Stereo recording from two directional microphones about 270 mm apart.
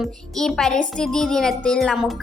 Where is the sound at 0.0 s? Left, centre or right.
Centre.